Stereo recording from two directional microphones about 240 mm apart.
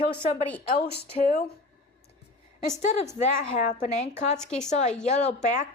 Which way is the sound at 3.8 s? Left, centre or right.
Left.